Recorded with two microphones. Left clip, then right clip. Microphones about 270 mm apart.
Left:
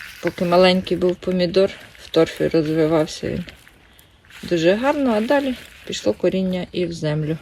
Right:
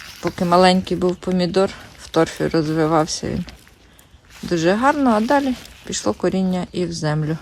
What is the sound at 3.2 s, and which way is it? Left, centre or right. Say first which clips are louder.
Speech: left 1 dB; right.